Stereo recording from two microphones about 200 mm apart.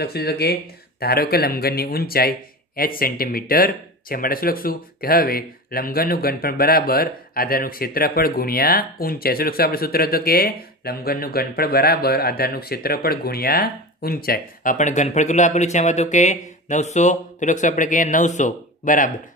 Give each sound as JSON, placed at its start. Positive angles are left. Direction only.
{"t": 0.0, "sound": "speech", "side_deg": 50}